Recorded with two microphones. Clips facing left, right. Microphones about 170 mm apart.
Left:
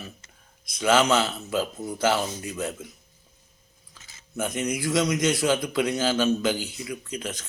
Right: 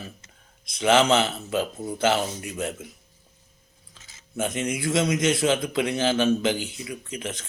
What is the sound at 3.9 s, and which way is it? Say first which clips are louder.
A man's voice: even; 25° right (ahead or behind).